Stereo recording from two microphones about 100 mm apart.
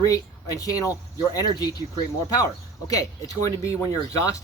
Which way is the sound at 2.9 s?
35° left (ahead or behind).